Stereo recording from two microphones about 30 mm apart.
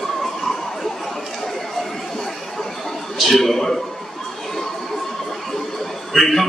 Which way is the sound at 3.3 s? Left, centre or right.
Centre.